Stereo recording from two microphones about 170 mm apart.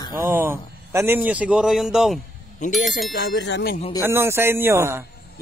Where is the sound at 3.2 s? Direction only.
85° left.